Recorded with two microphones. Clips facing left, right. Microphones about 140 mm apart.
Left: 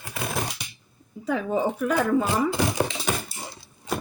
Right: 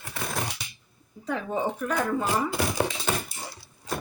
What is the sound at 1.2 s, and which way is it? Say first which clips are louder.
Speech: left 4 dB; 5° left (ahead or behind).